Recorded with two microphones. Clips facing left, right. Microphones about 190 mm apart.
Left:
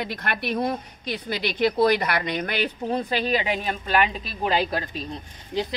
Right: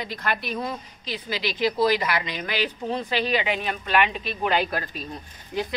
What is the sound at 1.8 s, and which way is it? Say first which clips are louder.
Speech: left 2 dB; 55° left (ahead or behind).